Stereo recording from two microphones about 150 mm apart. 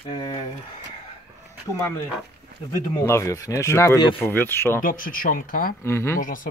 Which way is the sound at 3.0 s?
20° left (ahead or behind).